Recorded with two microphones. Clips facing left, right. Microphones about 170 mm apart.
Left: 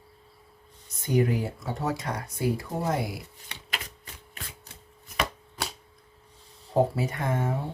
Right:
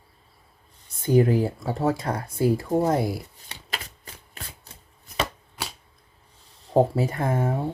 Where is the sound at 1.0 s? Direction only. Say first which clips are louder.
Right 5 dB; 30° right (ahead or behind).